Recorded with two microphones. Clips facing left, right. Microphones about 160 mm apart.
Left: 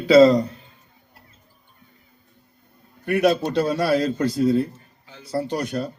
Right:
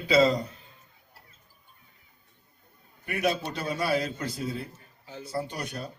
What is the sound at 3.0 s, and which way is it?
A man's voice, 85° left.